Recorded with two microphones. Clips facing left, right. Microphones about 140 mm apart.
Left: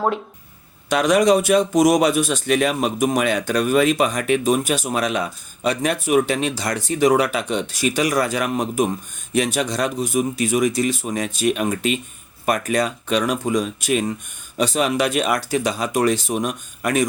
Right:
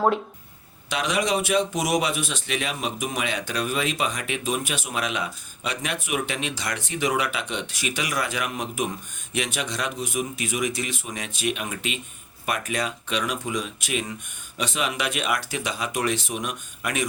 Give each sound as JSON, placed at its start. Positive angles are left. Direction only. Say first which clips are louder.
{"t": 0.9, "sound": "speech", "louder": "left 9 dB", "side_deg": 45}